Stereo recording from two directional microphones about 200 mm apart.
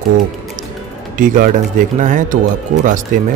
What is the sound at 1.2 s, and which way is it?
Speech, 40° right (ahead or behind).